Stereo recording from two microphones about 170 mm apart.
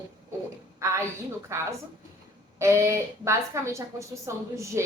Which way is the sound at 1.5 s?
15° right (ahead or behind).